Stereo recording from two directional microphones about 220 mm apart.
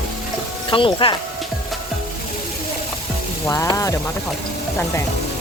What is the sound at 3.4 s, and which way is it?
Speech, 15° left (ahead or behind).